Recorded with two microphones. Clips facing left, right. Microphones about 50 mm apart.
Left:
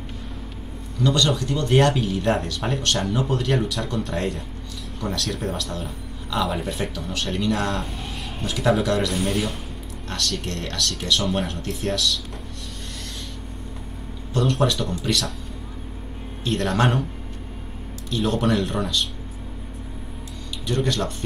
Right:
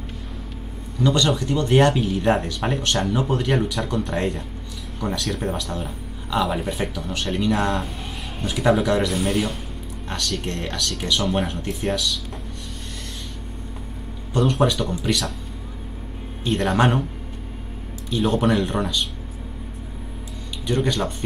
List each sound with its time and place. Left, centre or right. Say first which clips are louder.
0.9 s speech: right 1 dB; centre
10.0 s speech: right 1 dB; centre
14.3 s speech: right 2 dB; centre
16.4 s speech: right 2 dB; centre
18.1 s speech: right 2 dB; centre
20.6 s speech: right 2 dB; centre